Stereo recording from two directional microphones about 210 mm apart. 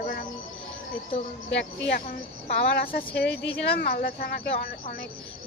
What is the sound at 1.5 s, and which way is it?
Speech, 60° left (ahead or behind).